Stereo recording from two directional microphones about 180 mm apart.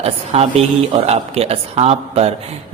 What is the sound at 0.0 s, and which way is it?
A man's voice, 35° right (ahead or behind).